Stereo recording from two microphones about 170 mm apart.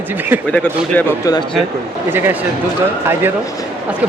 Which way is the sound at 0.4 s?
10° left (ahead or behind).